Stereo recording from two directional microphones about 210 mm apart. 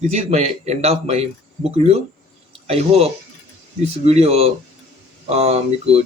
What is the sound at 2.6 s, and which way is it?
Speech, 30° right (ahead or behind).